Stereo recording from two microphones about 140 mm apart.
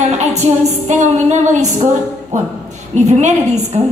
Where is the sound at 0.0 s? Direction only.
55° right (ahead or behind).